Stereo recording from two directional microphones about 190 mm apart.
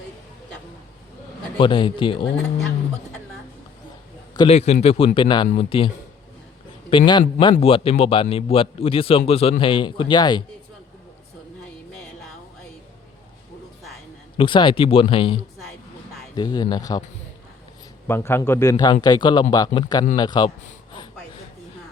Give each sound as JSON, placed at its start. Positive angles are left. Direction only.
{"t": 1.5, "sound": "a man's voice", "side_deg": 25}
{"t": 4.4, "sound": "a man's voice", "side_deg": 35}
{"t": 6.9, "sound": "a man's voice", "side_deg": 25}
{"t": 14.3, "sound": "a man's voice", "side_deg": 25}
{"t": 18.1, "sound": "a man's voice", "side_deg": 10}